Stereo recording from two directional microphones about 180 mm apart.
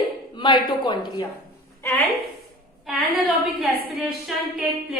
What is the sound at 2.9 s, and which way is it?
A woman's voice, centre (ahead or behind).